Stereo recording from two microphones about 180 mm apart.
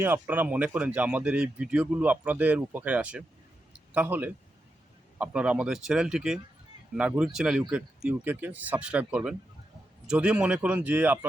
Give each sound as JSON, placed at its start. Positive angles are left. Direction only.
{"t": 0.0, "sound": "speech", "side_deg": -10}
{"t": 3.7, "sound": "a sound", "side_deg": -10}
{"t": 5.1, "sound": "speech", "side_deg": -5}